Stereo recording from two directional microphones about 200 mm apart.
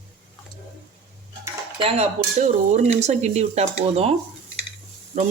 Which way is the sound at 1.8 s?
30° right (ahead or behind).